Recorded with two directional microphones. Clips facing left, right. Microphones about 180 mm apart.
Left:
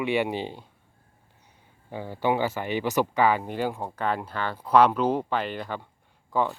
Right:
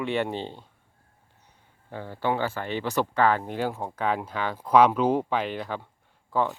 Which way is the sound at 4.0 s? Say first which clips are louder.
Right 1 dB; 5° right (ahead or behind).